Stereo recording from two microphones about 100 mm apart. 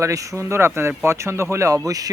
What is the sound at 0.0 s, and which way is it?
Speech, 30° right (ahead or behind).